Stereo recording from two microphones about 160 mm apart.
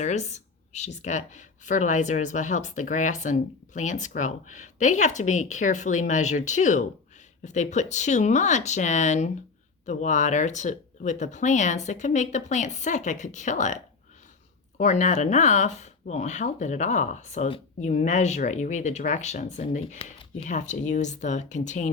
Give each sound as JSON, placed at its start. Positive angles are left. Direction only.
{"t": 0.0, "sound": "speech", "side_deg": 45}
{"t": 14.8, "sound": "speech", "side_deg": 50}